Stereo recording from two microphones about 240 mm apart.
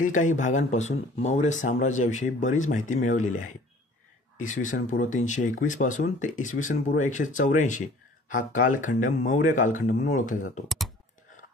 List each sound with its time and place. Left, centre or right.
0.0 s speech: left